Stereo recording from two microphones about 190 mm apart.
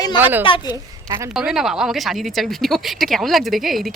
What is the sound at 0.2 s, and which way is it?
Speech, 10° right (ahead or behind).